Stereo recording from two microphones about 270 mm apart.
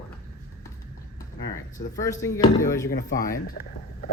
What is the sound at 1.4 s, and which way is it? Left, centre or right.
Speech, centre.